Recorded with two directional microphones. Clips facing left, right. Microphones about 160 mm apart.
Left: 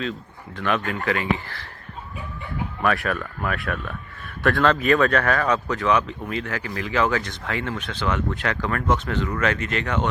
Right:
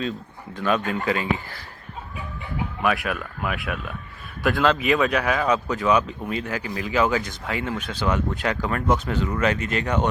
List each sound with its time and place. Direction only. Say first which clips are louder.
0.5 s speech: right 1 dB; 20° right (ahead or behind)
2.8 s speech: left 1 dB; 5° right (ahead or behind)